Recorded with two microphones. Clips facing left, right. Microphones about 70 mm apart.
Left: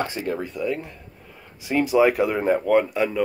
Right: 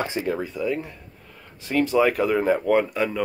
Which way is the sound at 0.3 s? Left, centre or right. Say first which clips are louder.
Right 1 dB; centre.